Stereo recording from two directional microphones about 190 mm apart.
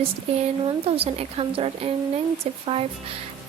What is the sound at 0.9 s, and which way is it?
A woman's voice, 30° right (ahead or behind).